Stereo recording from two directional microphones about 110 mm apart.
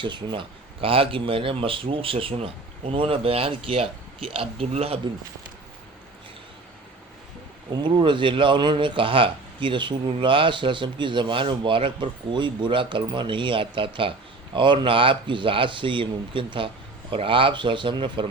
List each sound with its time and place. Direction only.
0.0 s speech: 45° right (ahead or behind); by 4.9 s 65° right (ahead or behind)
7.7 s a man's voice: 45° right (ahead or behind)